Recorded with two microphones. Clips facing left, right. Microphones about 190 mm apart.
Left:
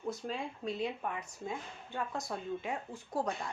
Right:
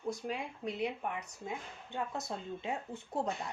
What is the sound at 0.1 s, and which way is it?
Speech, 15° right (ahead or behind).